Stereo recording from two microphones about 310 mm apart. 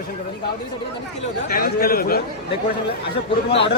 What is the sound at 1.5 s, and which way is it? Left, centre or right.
Speech, left.